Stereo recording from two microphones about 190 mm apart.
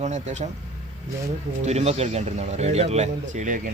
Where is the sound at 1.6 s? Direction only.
35° right (ahead or behind).